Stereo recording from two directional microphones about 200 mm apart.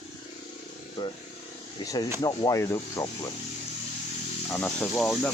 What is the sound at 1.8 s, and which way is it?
Speech, 20° left (ahead or behind).